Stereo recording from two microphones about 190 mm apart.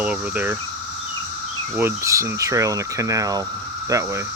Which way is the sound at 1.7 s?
15° right (ahead or behind).